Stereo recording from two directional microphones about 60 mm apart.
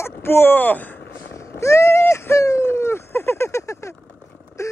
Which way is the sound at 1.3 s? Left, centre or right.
Left.